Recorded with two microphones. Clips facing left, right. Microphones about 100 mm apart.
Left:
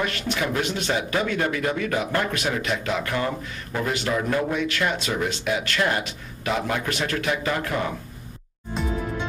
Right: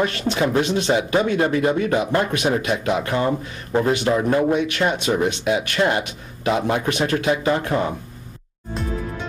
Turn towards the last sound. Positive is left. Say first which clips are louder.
# right 5 dB
turn(degrees=-25)  # may be behind; listen again after turning